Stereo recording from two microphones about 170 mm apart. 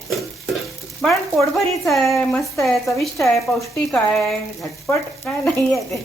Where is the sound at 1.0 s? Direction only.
Centre (ahead or behind).